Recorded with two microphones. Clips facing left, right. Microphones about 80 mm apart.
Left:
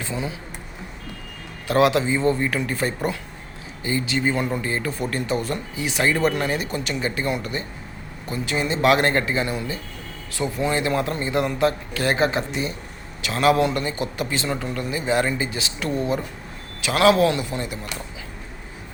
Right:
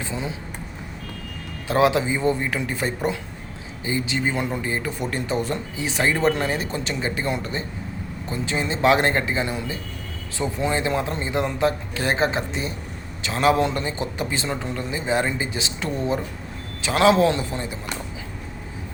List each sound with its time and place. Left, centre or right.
0.0 s speech: right
1.6 s a man's voice: right